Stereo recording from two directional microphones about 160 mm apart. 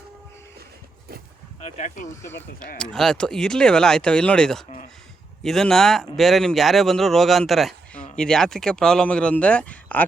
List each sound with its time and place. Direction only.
1.6 s speech: 45° left (ahead or behind)
2.2 s speech: 15° left (ahead or behind)